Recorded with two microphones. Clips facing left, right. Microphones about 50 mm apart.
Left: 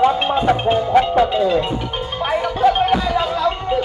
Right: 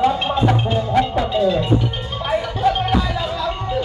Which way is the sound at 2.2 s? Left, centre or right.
Left.